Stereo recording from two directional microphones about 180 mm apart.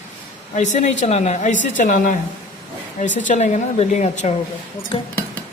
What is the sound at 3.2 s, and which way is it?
A woman's voice, 40° left (ahead or behind).